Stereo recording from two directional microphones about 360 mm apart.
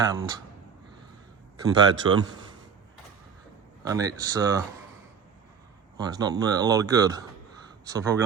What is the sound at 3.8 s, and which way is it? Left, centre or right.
Speech, centre.